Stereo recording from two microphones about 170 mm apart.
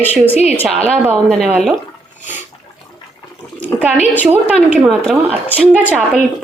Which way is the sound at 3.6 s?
10° left (ahead or behind).